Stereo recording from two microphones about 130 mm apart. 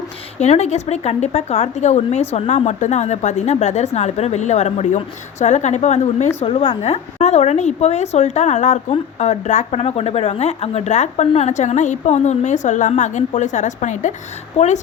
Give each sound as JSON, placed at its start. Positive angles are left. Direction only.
{"t": 0.3, "sound": "a woman's voice", "side_deg": 60}
{"t": 14.5, "sound": "a woman's voice", "side_deg": 55}